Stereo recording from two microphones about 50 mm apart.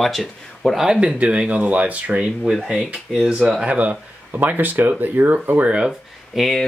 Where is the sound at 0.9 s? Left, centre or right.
Right.